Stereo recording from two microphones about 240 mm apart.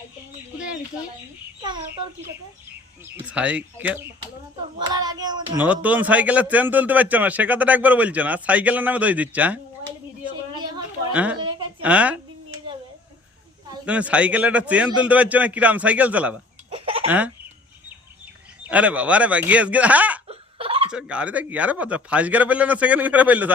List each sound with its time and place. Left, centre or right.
3.2 s a man's voice: centre
5.6 s a man's voice: centre
11.1 s a woman's voice: centre
11.3 s a sound: centre
11.8 s a man's voice: centre
13.8 s a man's voice: centre
16.6 s baby laughter: right
17.1 s a man's voice: centre
18.7 s a man's voice: centre
20.2 s laughter: right
20.9 s a man's voice: centre